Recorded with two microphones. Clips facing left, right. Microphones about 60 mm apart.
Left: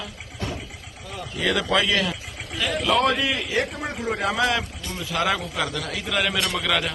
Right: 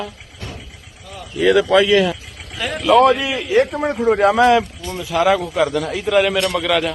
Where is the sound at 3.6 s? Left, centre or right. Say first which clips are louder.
Right 10 dB; right.